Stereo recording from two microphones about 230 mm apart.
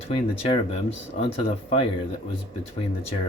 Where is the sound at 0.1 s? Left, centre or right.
Left.